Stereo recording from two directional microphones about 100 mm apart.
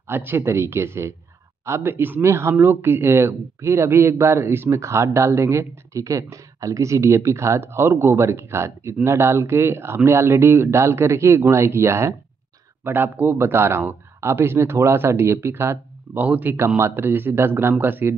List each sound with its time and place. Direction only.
0.0 s speech: 20° right (ahead or behind)